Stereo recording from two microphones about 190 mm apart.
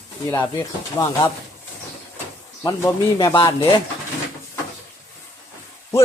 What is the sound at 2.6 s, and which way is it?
Speech, 20° left (ahead or behind).